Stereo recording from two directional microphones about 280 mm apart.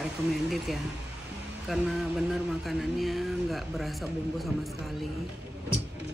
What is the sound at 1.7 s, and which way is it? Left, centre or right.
Speech, centre.